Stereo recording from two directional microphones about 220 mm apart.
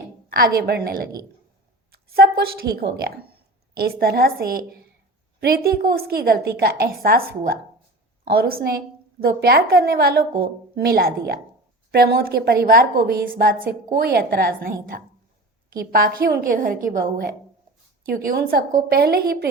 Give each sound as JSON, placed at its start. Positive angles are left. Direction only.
{"t": 0.3, "sound": "a woman's voice", "side_deg": -45}